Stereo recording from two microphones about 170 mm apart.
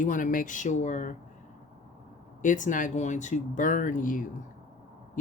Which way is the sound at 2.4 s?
50° left (ahead or behind).